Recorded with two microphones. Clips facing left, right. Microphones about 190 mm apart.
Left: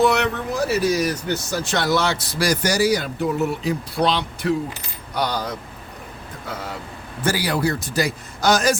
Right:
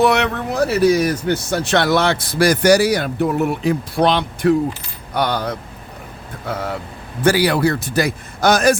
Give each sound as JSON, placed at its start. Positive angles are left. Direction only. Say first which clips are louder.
{"t": 0.0, "sound": "speech", "louder": "right 3 dB", "side_deg": -65}